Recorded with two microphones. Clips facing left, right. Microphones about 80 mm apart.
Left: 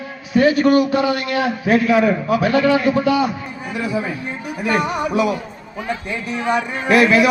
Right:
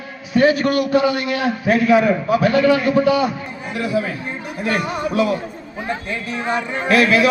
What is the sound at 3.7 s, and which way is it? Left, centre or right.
A man's voice, centre.